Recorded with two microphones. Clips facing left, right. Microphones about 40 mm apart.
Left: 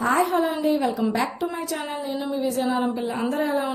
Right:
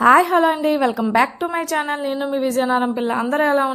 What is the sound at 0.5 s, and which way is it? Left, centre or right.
Speech, right.